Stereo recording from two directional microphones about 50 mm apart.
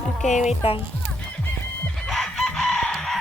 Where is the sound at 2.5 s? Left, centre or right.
Centre.